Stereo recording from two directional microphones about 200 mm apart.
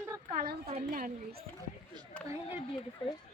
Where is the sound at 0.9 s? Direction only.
45° right (ahead or behind).